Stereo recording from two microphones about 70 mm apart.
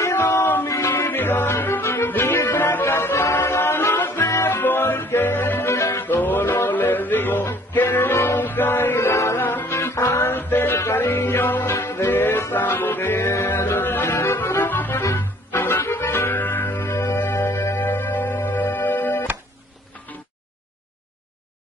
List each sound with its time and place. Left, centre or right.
0.0 s music: left
9.4 s music: left
9.7 s music: left
14.1 s accordion: left
15.1 s music: left